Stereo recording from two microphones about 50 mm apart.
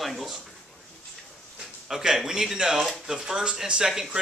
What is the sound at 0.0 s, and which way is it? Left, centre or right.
Speech, centre.